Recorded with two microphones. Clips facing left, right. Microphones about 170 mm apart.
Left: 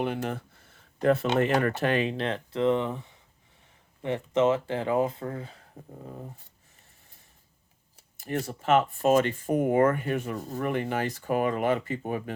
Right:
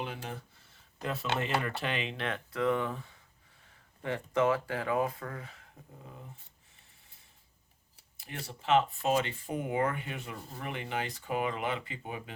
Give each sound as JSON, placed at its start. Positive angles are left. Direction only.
{"t": 0.0, "sound": "speech", "side_deg": 60}
{"t": 2.1, "sound": "speech", "side_deg": 30}
{"t": 8.2, "sound": "speech", "side_deg": 45}